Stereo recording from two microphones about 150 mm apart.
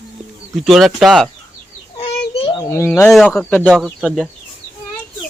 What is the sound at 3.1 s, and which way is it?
Speech, centre (ahead or behind).